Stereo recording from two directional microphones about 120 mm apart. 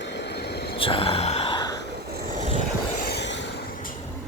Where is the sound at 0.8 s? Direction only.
50° left (ahead or behind).